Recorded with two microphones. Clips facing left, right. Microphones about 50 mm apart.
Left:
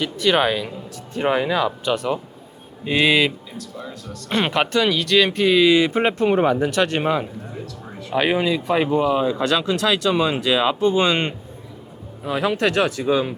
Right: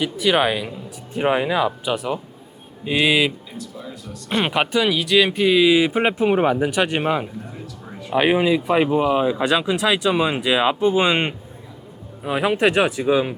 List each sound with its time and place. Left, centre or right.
0.0 s speech: centre